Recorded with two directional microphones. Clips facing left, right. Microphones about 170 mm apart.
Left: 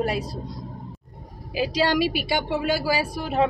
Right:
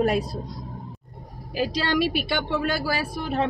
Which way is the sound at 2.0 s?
55° right (ahead or behind).